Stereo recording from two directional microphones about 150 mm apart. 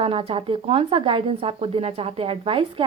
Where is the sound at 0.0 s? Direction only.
40° right (ahead or behind).